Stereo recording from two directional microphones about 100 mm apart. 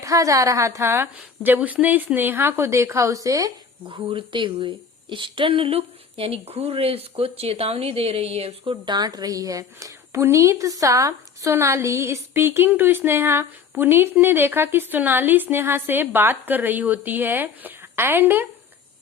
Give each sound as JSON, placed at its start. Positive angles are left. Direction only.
{"t": 0.0, "sound": "a woman's voice", "side_deg": -35}
{"t": 3.8, "sound": "a woman's voice", "side_deg": -60}
{"t": 8.7, "sound": "a woman's voice", "side_deg": -50}